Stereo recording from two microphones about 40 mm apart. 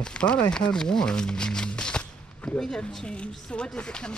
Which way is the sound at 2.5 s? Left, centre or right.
Centre.